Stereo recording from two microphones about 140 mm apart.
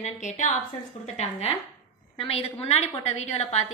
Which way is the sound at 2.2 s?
45° left (ahead or behind).